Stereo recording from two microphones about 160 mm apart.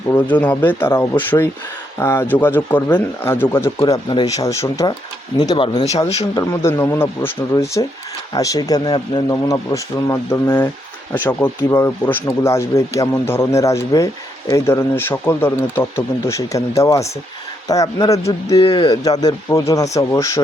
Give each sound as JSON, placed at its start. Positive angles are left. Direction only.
{"t": 0.1, "sound": "speech", "side_deg": 10}
{"t": 3.8, "sound": "speech", "side_deg": 25}
{"t": 6.3, "sound": "speech", "side_deg": 20}
{"t": 18.6, "sound": "speech", "side_deg": 30}